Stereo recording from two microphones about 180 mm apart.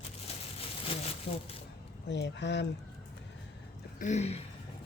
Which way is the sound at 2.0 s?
75° left (ahead or behind).